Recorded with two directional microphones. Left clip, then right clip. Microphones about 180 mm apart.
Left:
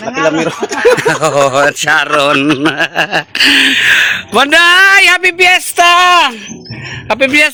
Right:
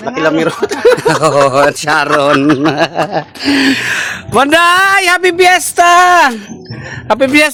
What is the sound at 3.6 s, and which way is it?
A man's voice, 10° right (ahead or behind).